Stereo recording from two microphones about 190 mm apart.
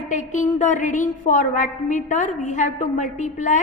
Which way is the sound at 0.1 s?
40° left (ahead or behind).